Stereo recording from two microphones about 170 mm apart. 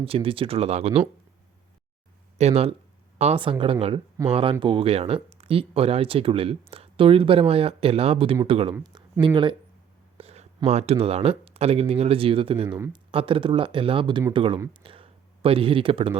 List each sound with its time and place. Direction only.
0.0 s speech: 35° right (ahead or behind)
2.4 s speech: 35° right (ahead or behind)
8.7 s speech: 25° right (ahead or behind)
10.2 s whispering: 35° right (ahead or behind)
10.7 s speech: 40° right (ahead or behind)
12.6 s speech: 15° right (ahead or behind)
12.9 s speech: 30° right (ahead or behind)